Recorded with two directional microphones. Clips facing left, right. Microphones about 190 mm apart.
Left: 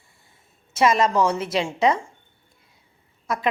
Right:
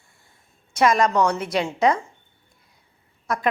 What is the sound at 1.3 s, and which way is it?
Speech, 25° left (ahead or behind).